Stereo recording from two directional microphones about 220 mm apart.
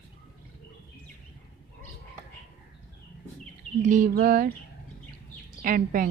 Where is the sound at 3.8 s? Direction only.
35° right (ahead or behind).